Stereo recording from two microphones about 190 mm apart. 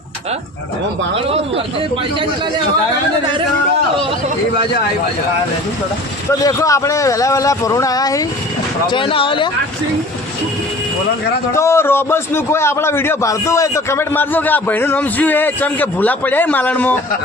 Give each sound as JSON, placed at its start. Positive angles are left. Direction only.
{"t": 1.1, "sound": "speech", "side_deg": -30}
{"t": 6.4, "sound": "a man's voice", "side_deg": 15}
{"t": 11.5, "sound": "a man's voice", "side_deg": 15}